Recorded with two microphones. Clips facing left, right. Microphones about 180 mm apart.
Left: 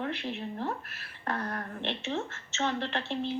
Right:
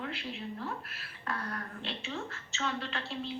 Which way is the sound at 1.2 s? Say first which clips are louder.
Left 4 dB; 45° left (ahead or behind).